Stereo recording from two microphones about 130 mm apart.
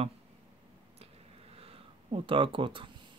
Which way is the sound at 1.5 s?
50° right (ahead or behind).